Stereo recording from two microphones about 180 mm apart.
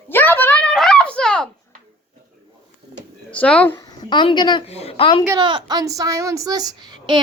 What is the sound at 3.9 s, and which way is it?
Speech, 25° left (ahead or behind).